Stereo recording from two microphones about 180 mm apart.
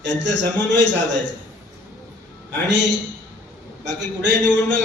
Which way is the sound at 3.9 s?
75° right (ahead or behind).